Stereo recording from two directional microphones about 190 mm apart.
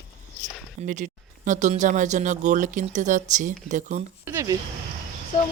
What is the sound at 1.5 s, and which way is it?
Speech, 40° right (ahead or behind).